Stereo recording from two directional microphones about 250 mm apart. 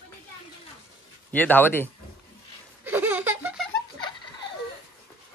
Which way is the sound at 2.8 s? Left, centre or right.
Centre.